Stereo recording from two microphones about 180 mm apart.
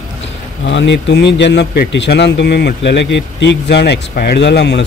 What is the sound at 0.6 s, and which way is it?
A man's voice, 80° left.